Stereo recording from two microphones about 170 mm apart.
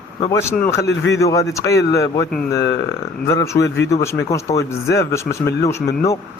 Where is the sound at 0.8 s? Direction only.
90° left.